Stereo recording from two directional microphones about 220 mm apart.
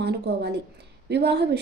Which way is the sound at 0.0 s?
50° right (ahead or behind).